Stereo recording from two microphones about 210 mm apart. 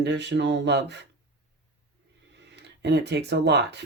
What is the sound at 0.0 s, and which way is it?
Speech, 55° right (ahead or behind).